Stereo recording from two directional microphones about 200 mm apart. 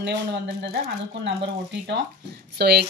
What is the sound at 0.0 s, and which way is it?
Speech, 60° right (ahead or behind).